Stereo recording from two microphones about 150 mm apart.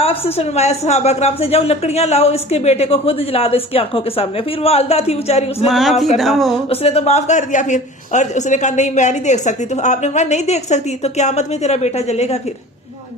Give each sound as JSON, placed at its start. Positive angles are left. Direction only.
{"t": 0.0, "sound": "a woman's voice", "side_deg": 40}
{"t": 5.6, "sound": "a sound", "side_deg": 0}
{"t": 6.7, "sound": "a woman's voice", "side_deg": 45}